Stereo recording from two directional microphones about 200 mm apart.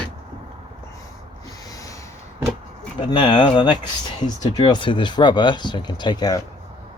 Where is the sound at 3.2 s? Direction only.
20° left (ahead or behind).